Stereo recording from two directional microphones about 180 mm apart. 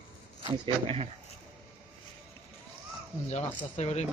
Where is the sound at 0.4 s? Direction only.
30° right (ahead or behind).